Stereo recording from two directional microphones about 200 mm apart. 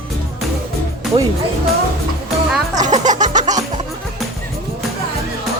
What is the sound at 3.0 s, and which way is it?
Music, 35° right (ahead or behind).